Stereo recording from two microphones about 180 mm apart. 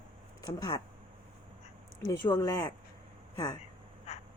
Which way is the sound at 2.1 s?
20° left (ahead or behind).